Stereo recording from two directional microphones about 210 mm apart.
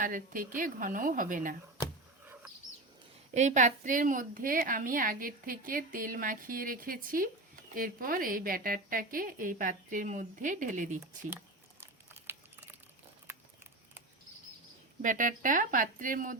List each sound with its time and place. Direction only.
0.0 s a woman's voice: 40° right (ahead or behind)
2.2 s chicken: 10° right (ahead or behind)
3.3 s a woman's voice: 35° right (ahead or behind)
11.0 s a sound: 10° right (ahead or behind)
12.3 s typing: 10° right (ahead or behind)
13.3 s a sound: 10° right (ahead or behind)
15.0 s a woman's voice: 40° right (ahead or behind)